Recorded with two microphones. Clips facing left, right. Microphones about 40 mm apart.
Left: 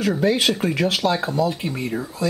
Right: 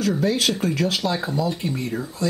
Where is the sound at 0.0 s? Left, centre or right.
Centre.